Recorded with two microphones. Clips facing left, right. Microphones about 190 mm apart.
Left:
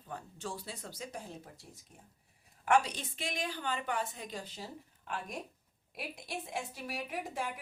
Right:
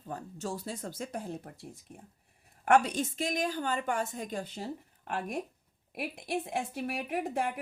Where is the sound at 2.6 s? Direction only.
55° right (ahead or behind).